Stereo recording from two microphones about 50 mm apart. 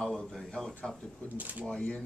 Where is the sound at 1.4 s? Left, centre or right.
Right.